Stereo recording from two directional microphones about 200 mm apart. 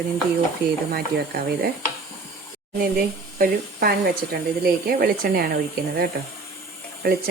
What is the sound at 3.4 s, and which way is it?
Speech, 50° right (ahead or behind).